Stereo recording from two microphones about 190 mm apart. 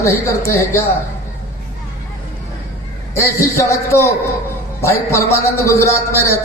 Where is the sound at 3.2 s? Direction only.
15° left (ahead or behind).